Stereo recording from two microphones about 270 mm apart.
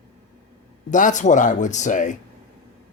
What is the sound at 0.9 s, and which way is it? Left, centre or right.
Speech, left.